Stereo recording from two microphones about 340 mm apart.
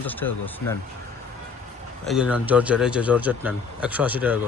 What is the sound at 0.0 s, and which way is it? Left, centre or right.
Speech, centre.